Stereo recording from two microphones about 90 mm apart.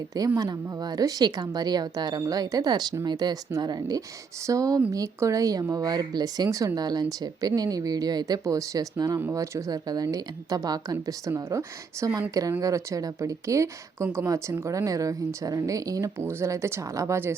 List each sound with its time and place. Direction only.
0.3 s speech: 45° right (ahead or behind); by 17.3 s 30° right (ahead or behind)